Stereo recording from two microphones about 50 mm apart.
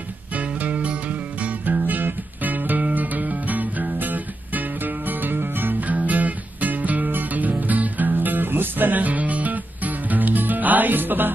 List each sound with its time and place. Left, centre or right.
0.4 s music: right